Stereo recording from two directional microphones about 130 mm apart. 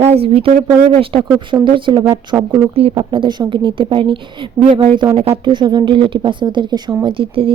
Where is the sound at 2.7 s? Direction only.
50° right (ahead or behind).